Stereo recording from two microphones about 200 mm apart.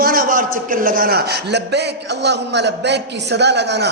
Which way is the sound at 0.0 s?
45° right (ahead or behind).